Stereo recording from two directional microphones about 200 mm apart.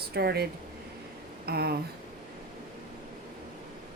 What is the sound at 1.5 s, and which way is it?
Speech, 50° right (ahead or behind).